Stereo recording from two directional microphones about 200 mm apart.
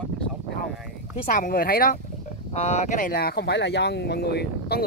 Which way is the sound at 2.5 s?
35° left (ahead or behind).